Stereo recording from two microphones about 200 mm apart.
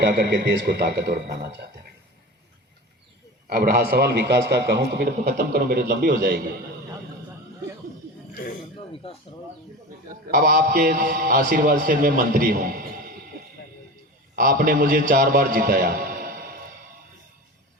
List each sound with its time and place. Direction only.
0.0 s speech: 55° right (ahead or behind)
3.4 s a man's voice: 50° right (ahead or behind)
9.0 s speech: 30° left (ahead or behind)
10.2 s a man's voice: 45° right (ahead or behind)
14.3 s a man's voice: 45° right (ahead or behind)